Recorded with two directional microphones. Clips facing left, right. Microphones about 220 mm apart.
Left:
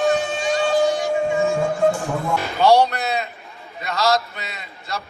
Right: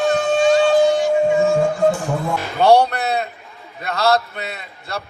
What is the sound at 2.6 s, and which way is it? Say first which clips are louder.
A man's voice: right 2 dB; 55° right (ahead or behind).